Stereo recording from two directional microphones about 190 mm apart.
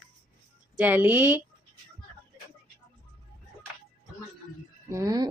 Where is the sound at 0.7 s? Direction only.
10° right (ahead or behind).